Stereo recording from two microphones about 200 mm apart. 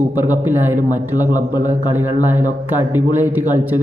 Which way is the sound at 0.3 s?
10° right (ahead or behind).